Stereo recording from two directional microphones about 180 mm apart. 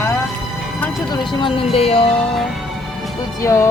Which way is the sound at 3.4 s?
15° left (ahead or behind).